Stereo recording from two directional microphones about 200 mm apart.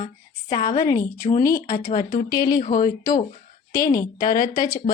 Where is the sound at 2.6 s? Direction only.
45° left (ahead or behind).